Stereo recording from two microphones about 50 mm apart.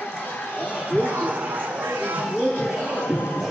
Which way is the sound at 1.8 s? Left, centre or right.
Right.